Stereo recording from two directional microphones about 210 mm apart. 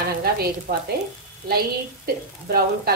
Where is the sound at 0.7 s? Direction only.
40° right (ahead or behind).